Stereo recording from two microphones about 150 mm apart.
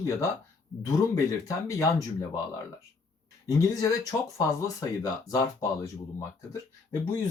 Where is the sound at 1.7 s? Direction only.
20° left (ahead or behind).